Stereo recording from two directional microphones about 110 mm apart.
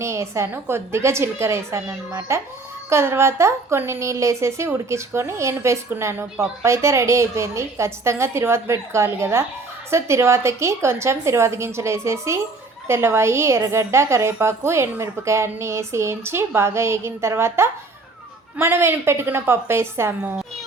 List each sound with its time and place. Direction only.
0.0 s a woman's voice: 25° right (ahead or behind)